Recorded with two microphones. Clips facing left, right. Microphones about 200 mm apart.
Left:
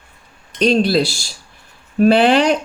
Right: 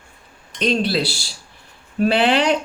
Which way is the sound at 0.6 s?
40° left (ahead or behind).